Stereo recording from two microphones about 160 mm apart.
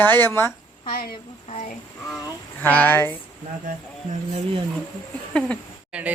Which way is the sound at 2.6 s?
10° left (ahead or behind).